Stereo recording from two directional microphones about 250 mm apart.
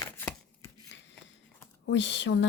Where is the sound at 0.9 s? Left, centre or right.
Left.